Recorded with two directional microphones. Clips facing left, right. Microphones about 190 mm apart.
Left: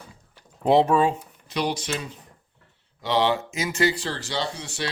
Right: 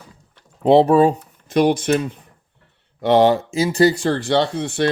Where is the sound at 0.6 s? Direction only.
30° right (ahead or behind).